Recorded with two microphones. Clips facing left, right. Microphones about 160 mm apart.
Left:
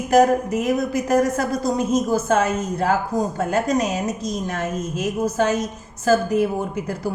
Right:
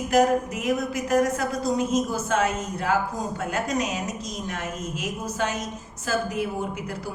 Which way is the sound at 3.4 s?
40° left (ahead or behind).